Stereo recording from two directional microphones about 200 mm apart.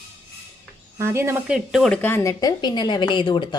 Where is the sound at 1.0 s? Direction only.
15° right (ahead or behind).